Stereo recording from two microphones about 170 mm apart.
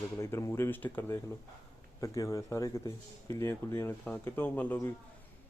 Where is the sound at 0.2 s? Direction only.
15° left (ahead or behind).